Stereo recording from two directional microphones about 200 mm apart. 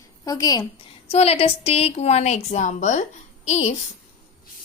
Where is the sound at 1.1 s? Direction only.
30° left (ahead or behind).